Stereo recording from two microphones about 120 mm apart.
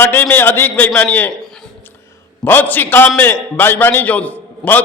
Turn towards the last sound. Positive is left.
turn(degrees=15)  # may be behind; listen again after turning